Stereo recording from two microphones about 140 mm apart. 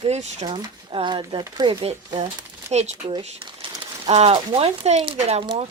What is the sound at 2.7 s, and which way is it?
Speech, 55° right (ahead or behind).